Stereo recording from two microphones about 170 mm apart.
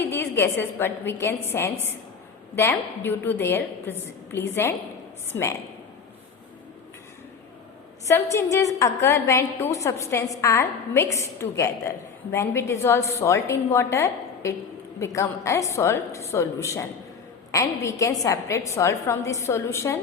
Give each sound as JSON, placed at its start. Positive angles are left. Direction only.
{"t": 0.0, "sound": "a woman's voice", "side_deg": 15}
{"t": 8.0, "sound": "a woman's voice", "side_deg": 15}